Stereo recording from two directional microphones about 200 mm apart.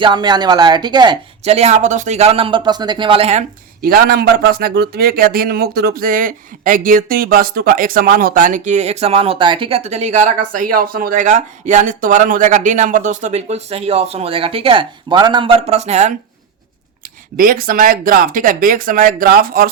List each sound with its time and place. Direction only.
0.0 s speech: 20° right (ahead or behind)
3.8 s speech: 45° right (ahead or behind)
17.3 s speech: 45° right (ahead or behind)